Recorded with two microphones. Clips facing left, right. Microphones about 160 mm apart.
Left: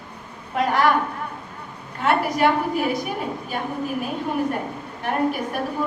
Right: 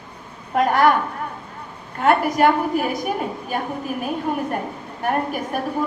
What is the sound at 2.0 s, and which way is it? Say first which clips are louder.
A woman's voice: right 3 dB; 45° right (ahead or behind).